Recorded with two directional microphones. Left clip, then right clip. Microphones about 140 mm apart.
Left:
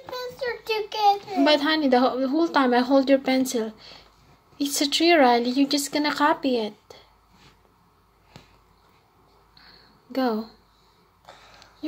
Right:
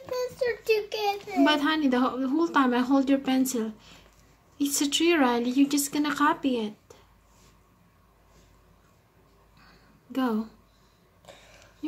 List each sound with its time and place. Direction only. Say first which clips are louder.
0.7 s a child's voice: left 8 dB; 35° right (ahead or behind)
10.1 s speech: left 4 dB; 40° right (ahead or behind)